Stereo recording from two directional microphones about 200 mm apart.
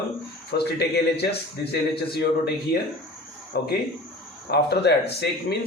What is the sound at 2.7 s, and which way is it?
Speech, 50° left (ahead or behind).